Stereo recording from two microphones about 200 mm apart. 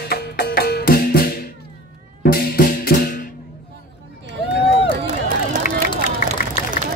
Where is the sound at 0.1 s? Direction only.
50° left (ahead or behind).